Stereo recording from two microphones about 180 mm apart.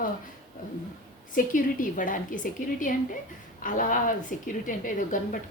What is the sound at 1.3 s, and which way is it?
A woman's voice, 50° left (ahead or behind).